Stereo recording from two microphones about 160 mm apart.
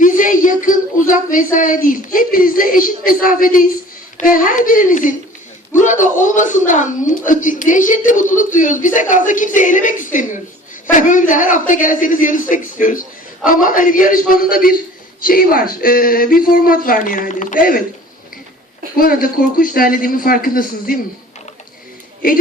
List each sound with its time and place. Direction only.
0.0 s a sound: 55° left (ahead or behind)
4.2 s speech: 55° left (ahead or behind)
18.9 s speech: 60° left (ahead or behind)
22.2 s speech: 60° left (ahead or behind)